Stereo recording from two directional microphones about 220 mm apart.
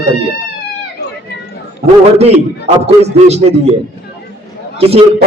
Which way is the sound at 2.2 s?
30° right (ahead or behind).